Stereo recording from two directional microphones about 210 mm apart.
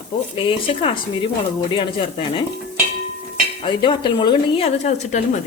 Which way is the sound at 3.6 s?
25° left (ahead or behind).